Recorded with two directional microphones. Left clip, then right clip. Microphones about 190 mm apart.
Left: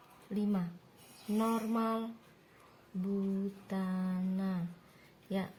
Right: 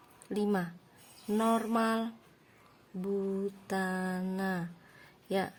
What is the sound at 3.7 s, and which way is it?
Speech, 45° right (ahead or behind).